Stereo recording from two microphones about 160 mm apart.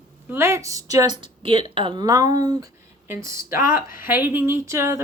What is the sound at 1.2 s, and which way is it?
A woman's voice, 35° right (ahead or behind).